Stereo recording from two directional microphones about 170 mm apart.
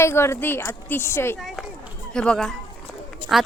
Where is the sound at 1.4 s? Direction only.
Centre (ahead or behind).